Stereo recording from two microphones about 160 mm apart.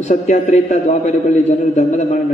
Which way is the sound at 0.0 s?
50° left (ahead or behind).